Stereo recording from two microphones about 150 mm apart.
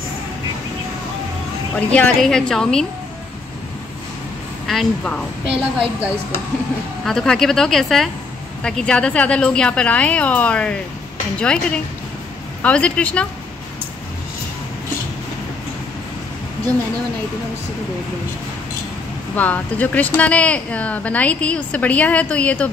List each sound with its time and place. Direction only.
1.8 s a woman's voice: 10° left (ahead or behind)
4.6 s a woman's voice: 5° left (ahead or behind)
7.1 s a woman's voice: 5° left (ahead or behind)
19.3 s speech: 10° left (ahead or behind)